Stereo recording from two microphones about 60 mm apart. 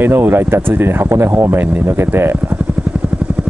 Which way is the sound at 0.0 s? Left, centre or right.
Right.